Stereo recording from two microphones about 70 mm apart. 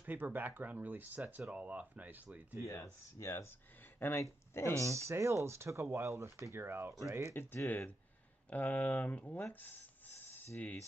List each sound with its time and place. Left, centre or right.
0.0 s speech: right
2.6 s speech: left
3.8 s a sound: left
4.2 s speech: left
4.8 s speech: right
7.0 s speech: right
7.3 s speech: left
9.5 s a sound: left